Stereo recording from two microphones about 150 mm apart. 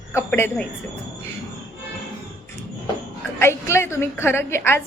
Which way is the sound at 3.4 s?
15° left (ahead or behind).